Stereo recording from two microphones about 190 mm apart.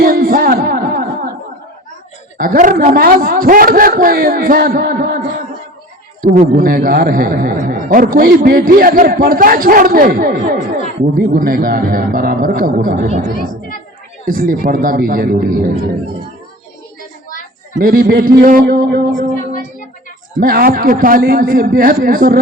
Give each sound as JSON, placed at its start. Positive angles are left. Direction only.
{"t": 0.0, "sound": "music", "side_deg": -50}
{"t": 2.4, "sound": "a man's voice", "side_deg": -45}
{"t": 6.5, "sound": "a man's voice", "side_deg": -50}
{"t": 10.6, "sound": "speech", "side_deg": 40}
{"t": 11.2, "sound": "a man's voice", "side_deg": -50}
{"t": 14.3, "sound": "a man's voice", "side_deg": -50}
{"t": 17.8, "sound": "a man's voice", "side_deg": -50}
{"t": 20.3, "sound": "a man's voice", "side_deg": -50}